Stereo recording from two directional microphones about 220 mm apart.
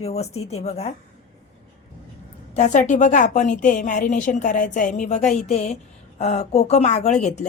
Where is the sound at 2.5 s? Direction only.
35° left (ahead or behind).